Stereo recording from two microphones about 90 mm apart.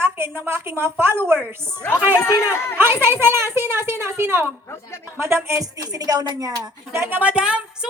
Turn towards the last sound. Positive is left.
turn(degrees=-10)  # may be behind; listen again after turning